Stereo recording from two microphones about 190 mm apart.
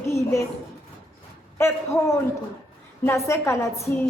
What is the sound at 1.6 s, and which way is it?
A woman's voice, 15° left (ahead or behind).